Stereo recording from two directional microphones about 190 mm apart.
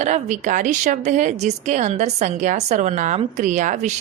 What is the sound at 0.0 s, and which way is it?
Speech, 40° right (ahead or behind).